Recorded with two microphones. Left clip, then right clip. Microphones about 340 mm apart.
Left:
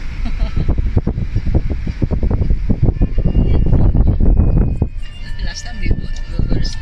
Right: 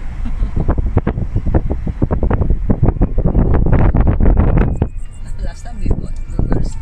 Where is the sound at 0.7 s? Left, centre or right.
Right.